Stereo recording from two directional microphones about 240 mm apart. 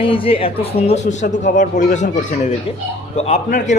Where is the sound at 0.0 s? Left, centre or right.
Left.